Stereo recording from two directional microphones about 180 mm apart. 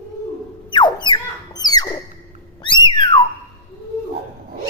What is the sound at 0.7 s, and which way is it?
Music, 25° left (ahead or behind).